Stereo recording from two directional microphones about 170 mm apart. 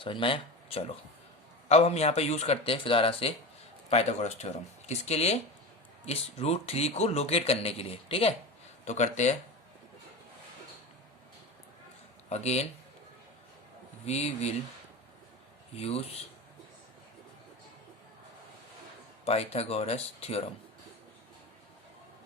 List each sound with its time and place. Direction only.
0.0 s speech: 30° left (ahead or behind)
12.3 s speech: 40° left (ahead or behind)
14.0 s speech: 40° left (ahead or behind)
15.8 s speech: 35° left (ahead or behind)
19.2 s speech: 40° left (ahead or behind)